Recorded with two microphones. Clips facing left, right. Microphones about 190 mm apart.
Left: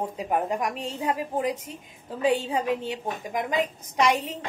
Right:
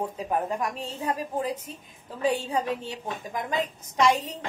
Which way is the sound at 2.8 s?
20° left (ahead or behind).